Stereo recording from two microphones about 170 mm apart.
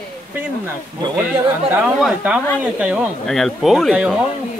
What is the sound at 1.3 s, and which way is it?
Speech, 5° right (ahead or behind).